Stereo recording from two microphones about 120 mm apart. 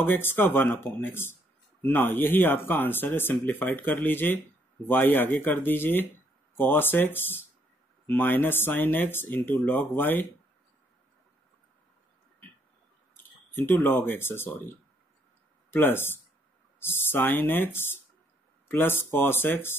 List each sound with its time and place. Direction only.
0.0 s speech: 15° left (ahead or behind)
13.1 s speech: 15° left (ahead or behind)